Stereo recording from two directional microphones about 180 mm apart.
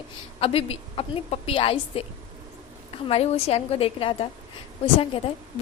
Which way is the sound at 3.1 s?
35° left (ahead or behind).